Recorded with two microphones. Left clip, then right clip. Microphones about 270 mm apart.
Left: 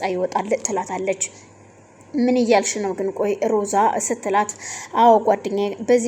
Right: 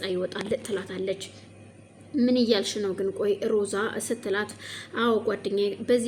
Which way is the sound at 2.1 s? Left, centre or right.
Centre.